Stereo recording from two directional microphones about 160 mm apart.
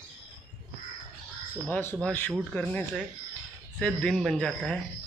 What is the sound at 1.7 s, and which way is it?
Speech, 10° left (ahead or behind).